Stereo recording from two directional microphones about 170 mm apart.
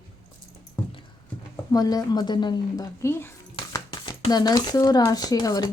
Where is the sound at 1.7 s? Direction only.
20° left (ahead or behind).